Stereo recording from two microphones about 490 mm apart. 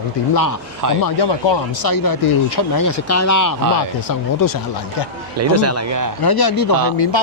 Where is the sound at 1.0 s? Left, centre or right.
Left.